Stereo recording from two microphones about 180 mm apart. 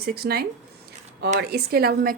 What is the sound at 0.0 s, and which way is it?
Speech, 60° right (ahead or behind).